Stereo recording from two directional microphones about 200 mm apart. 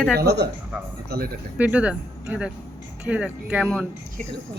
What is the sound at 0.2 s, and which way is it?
A man's voice, 55° right (ahead or behind).